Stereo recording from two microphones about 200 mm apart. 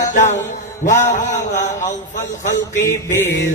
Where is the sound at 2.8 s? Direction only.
15° left (ahead or behind).